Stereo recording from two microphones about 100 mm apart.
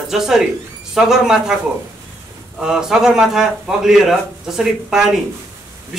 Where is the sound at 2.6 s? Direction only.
5° right (ahead or behind).